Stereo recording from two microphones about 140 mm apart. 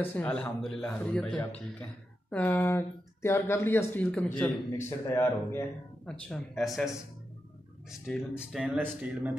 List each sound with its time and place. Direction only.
0.0 s a man's voice: 10° left (ahead or behind)
4.8 s speech: 20° left (ahead or behind)
6.0 s speech: 5° left (ahead or behind)